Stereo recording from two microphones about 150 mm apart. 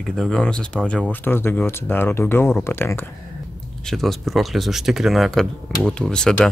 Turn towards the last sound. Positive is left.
turn(degrees=5)  # may be behind; listen again after turning